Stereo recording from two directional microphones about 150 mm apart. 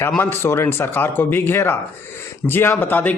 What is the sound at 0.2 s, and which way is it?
Speech, 15° left (ahead or behind).